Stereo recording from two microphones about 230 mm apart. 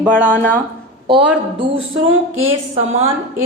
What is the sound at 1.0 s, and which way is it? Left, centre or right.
Speech, right.